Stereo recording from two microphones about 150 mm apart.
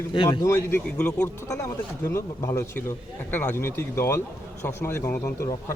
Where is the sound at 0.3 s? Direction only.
20° left (ahead or behind).